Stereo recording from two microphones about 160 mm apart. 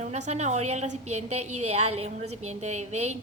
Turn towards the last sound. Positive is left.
turn(degrees=-45)  # may be behind; listen again after turning